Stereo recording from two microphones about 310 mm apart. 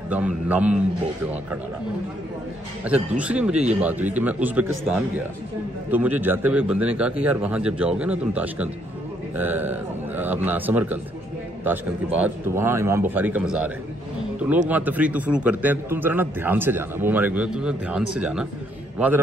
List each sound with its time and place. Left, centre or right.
0.1 s a man's voice: centre
2.8 s a man's voice: centre
5.9 s a man's voice: centre
14.7 s a man's voice: centre